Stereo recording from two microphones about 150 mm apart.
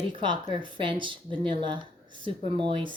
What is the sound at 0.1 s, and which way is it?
Speech, 35° right (ahead or behind).